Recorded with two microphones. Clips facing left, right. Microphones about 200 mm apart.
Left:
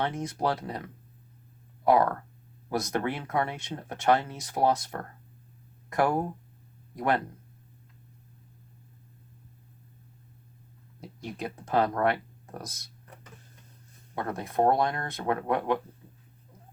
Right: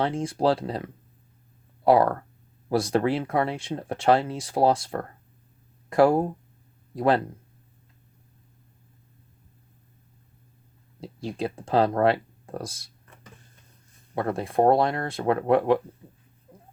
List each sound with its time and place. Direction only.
0.0 s speech: 25° right (ahead or behind)
11.0 s speech: 30° right (ahead or behind)
14.2 s speech: 30° right (ahead or behind)